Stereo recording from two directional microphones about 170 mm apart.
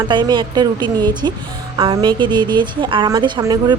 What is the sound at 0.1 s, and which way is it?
A woman's voice, 25° right (ahead or behind).